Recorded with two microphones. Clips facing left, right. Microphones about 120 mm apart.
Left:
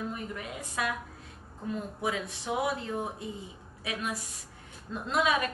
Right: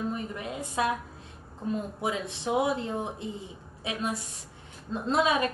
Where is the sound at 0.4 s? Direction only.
25° right (ahead or behind).